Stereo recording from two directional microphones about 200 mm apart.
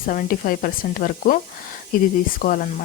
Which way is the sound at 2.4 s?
45° left (ahead or behind).